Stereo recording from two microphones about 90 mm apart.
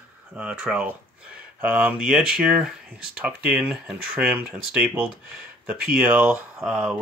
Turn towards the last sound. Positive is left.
turn(degrees=-10)  # may be behind; listen again after turning